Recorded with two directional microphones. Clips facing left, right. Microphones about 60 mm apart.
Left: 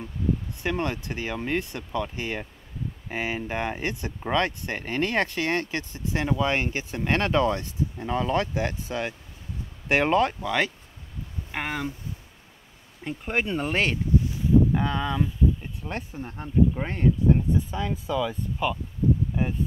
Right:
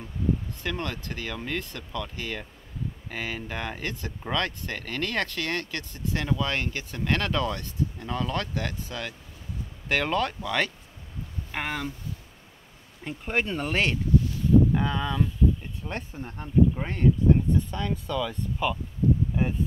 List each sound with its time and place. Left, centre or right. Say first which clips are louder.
0.6 s speech: left 4 dB; centre
13.0 s speech: left 1 dB; centre
19.4 s a sound: even; centre